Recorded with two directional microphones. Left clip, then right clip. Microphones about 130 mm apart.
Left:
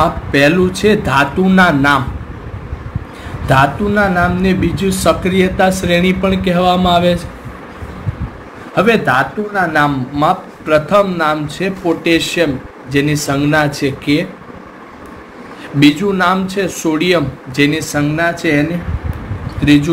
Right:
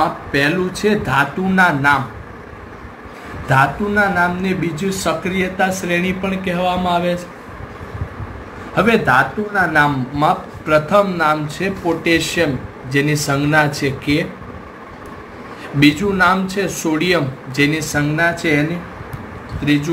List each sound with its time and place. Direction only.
0.3 s a man's voice: 80° left; by 2.0 s 55° left (ahead or behind)
3.4 s speech: 50° left (ahead or behind)
8.7 s speech: 45° left (ahead or behind)
15.8 s speech: 45° left (ahead or behind)
19.6 s speech: 50° left (ahead or behind)